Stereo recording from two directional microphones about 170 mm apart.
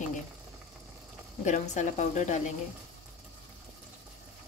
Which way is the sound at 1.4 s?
45° left (ahead or behind).